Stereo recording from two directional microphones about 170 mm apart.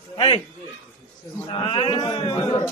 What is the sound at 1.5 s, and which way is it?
A man's voice, 35° left (ahead or behind).